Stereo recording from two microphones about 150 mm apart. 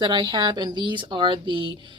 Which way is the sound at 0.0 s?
30° right (ahead or behind).